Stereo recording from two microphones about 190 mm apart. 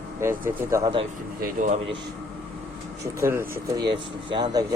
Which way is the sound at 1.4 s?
40° right (ahead or behind).